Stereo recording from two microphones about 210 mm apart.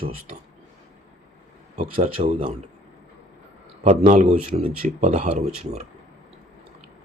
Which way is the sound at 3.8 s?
35° right (ahead or behind).